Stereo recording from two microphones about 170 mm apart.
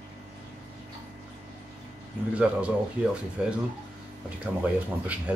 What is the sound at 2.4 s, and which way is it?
Speech, 5° right (ahead or behind).